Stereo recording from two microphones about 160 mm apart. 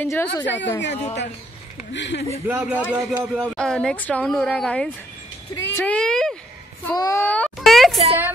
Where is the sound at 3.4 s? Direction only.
5° left (ahead or behind).